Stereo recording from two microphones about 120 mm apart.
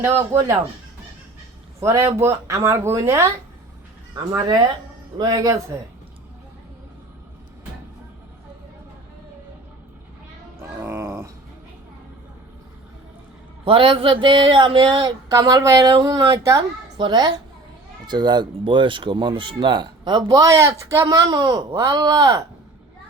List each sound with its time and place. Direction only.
0.0 s speech: 25° right (ahead or behind)
1.8 s speech: 25° right (ahead or behind)
10.6 s cat: 20° right (ahead or behind)
13.7 s speech: 45° right (ahead or behind); by 16.6 s 25° right (ahead or behind)
17.0 s speech: 40° right (ahead or behind)